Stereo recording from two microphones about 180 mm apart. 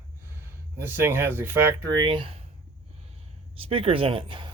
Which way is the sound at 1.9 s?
25° right (ahead or behind).